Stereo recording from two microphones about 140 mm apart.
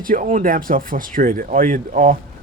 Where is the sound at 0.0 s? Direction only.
70° right (ahead or behind).